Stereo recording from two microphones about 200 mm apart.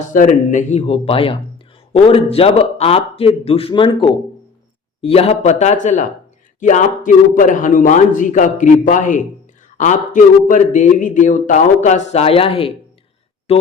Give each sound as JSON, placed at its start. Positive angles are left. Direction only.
{"t": 0.1, "sound": "speech", "side_deg": 40}